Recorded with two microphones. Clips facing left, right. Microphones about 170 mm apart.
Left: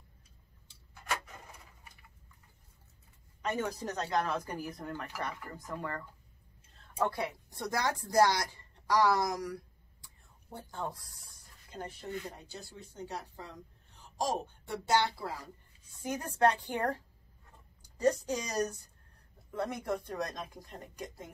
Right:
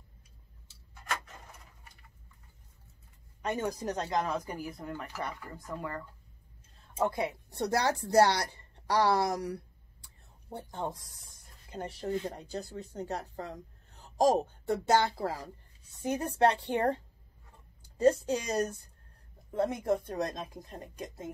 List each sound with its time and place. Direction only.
1.0 s a sound: 5° left (ahead or behind)
3.4 s speech: 15° right (ahead or behind)
7.0 s speech: 20° right (ahead or behind)
12.0 s speech: 35° right (ahead or behind)
16.0 s speech: 25° right (ahead or behind)